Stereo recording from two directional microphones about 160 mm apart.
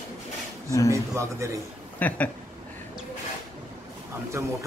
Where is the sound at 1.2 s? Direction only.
20° right (ahead or behind).